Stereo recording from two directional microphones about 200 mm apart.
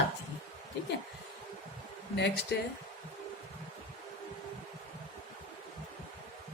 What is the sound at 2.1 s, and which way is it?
Speech, 60° left (ahead or behind).